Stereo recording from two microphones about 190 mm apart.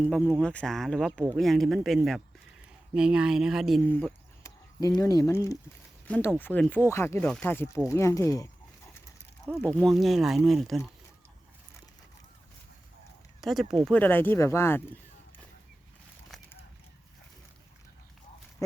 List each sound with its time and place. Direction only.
0.1 s speech: 5° left (ahead or behind)
3.8 s speech: 10° left (ahead or behind)
9.7 s speech: centre (ahead or behind)
13.4 s speech: centre (ahead or behind)